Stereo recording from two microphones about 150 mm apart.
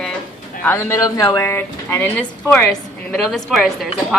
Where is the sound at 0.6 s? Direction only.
15° left (ahead or behind).